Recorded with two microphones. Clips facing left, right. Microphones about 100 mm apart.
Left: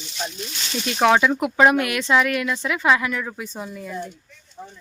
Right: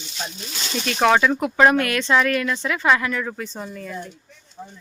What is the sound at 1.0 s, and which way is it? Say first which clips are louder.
Speech: even; 5° left (ahead or behind).